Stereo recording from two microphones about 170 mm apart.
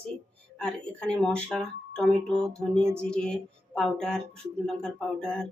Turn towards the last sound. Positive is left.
turn(degrees=5)  # may be behind; listen again after turning